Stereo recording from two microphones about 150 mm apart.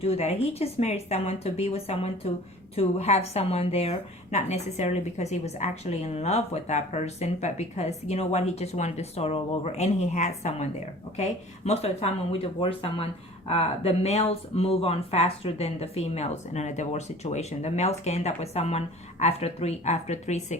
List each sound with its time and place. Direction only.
0.0 s a woman's voice: 40° left (ahead or behind)